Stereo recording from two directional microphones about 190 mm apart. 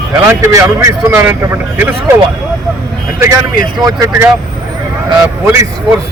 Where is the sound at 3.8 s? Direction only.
15° right (ahead or behind).